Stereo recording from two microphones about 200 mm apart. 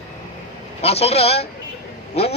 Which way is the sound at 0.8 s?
30° left (ahead or behind).